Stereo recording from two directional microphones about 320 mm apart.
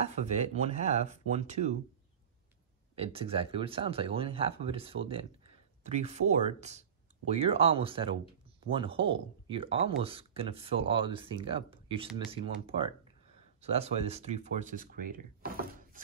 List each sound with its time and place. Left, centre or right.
0.0 s speech: right
3.0 s speech: centre